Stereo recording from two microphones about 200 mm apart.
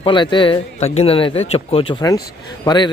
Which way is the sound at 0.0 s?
25° left (ahead or behind).